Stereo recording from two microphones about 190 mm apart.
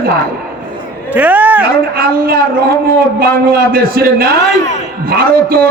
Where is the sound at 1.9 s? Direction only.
50° right (ahead or behind).